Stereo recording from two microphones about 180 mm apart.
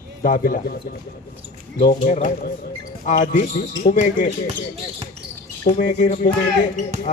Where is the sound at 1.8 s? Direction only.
60° left (ahead or behind).